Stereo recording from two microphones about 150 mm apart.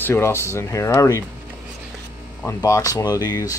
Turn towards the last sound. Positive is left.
turn(degrees=25)  # may be behind; listen again after turning